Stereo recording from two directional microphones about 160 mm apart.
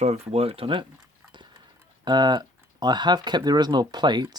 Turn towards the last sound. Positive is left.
turn(degrees=-25)  # may be behind; listen again after turning